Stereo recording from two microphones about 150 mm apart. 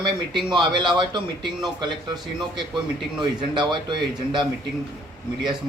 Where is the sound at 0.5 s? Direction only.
30° right (ahead or behind).